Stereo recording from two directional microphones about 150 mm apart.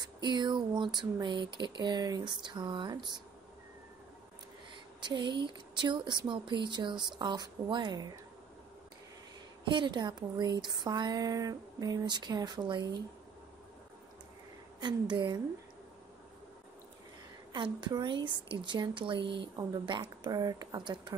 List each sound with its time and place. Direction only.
0.0 s a woman's voice: 30° right (ahead or behind)
5.0 s a woman's voice: 30° right (ahead or behind)
9.7 s speech: 30° right (ahead or behind)
14.8 s a woman's voice: 30° right (ahead or behind)
17.5 s a woman's voice: 30° right (ahead or behind)